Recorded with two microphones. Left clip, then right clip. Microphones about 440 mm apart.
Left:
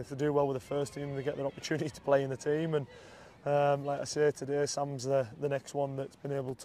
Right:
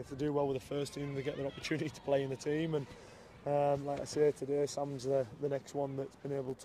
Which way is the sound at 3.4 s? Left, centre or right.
Left.